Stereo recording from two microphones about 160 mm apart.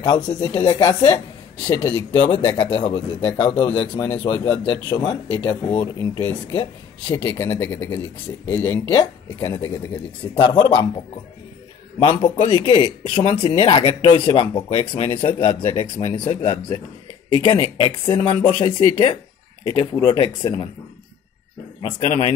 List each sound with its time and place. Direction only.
0.3 s speech: 35° left (ahead or behind); by 8.7 s 15° left (ahead or behind)
8.9 s speech: 30° left (ahead or behind)